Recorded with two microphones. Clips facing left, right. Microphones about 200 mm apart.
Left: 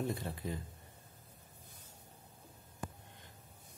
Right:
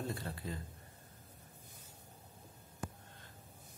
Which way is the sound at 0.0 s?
20° left (ahead or behind).